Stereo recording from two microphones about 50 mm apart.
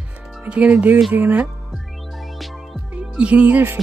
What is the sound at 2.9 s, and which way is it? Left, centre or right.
Music, right.